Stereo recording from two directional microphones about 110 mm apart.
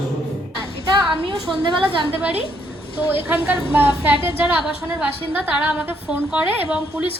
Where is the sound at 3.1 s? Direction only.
15° right (ahead or behind).